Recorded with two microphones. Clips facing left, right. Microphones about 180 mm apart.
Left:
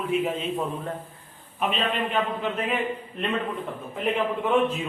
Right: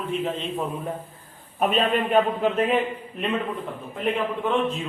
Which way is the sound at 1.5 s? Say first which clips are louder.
Right 5 dB; 45° right (ahead or behind).